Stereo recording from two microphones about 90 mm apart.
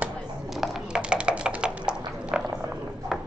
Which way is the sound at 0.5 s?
5° right (ahead or behind).